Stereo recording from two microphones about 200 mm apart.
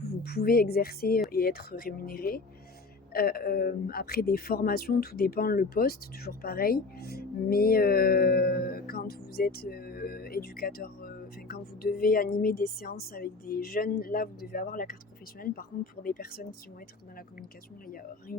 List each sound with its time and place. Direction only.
0.0 s speech: 50° left (ahead or behind)
17.8 s speech: 45° left (ahead or behind)